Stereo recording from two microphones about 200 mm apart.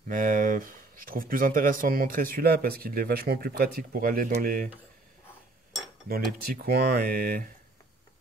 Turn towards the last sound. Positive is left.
turn(degrees=-45)  # may be behind; listen again after turning